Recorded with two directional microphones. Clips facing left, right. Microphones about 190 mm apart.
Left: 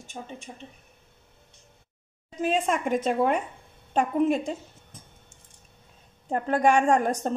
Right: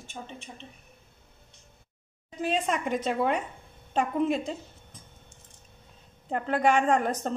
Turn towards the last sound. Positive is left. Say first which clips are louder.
# left 3 dB
turn(degrees=40)  # may be behind; listen again after turning